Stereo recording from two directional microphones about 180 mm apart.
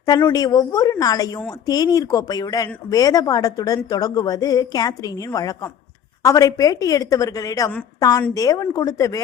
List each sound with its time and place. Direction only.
0.0 s a woman's voice: 20° left (ahead or behind)